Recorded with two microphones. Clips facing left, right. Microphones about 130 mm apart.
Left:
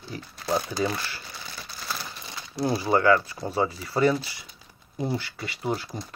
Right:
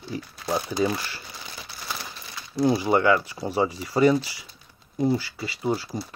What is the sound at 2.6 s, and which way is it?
Speech, 15° right (ahead or behind).